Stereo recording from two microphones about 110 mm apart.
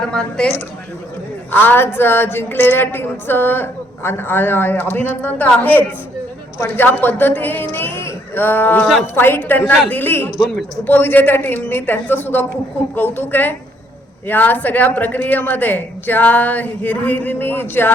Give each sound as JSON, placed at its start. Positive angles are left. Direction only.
{"t": 0.1, "sound": "a woman's voice", "side_deg": 5}
{"t": 1.5, "sound": "a woman's voice", "side_deg": 20}
{"t": 10.3, "sound": "speech", "side_deg": 0}
{"t": 10.8, "sound": "a woman's voice", "side_deg": 15}